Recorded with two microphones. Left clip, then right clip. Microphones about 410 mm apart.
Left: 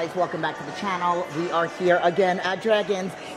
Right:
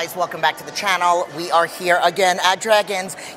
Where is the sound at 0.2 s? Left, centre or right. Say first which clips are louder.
Right 2 dB; right.